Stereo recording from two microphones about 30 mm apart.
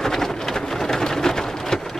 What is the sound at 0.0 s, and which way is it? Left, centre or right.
Rain, centre.